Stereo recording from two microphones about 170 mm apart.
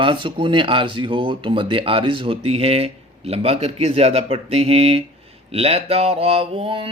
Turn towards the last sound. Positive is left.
turn(degrees=-35)  # may be behind; listen again after turning